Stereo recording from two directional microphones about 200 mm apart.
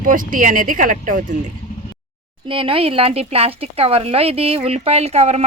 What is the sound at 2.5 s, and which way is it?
Speech, 25° right (ahead or behind).